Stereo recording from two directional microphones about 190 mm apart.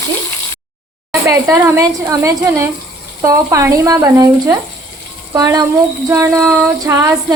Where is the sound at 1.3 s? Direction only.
15° right (ahead or behind).